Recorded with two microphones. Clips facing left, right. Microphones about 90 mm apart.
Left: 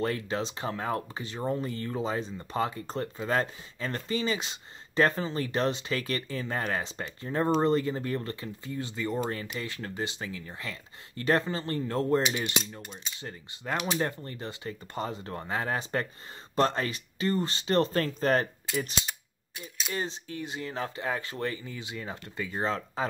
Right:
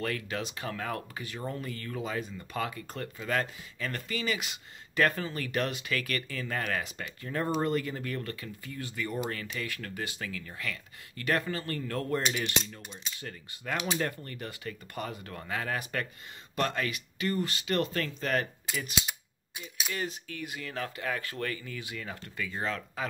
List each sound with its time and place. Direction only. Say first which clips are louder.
0.0 s speech: left 4 dB; 25° left (ahead or behind)
19.0 s cap gun: even; 10° right (ahead or behind)
19.9 s speech: left 3 dB; 30° left (ahead or behind)